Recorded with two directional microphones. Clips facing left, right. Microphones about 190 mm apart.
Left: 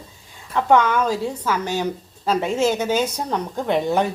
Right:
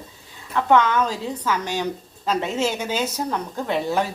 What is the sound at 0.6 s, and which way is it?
A woman's voice, 10° left (ahead or behind).